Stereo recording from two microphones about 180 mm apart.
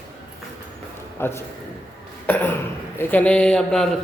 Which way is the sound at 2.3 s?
10° left (ahead or behind).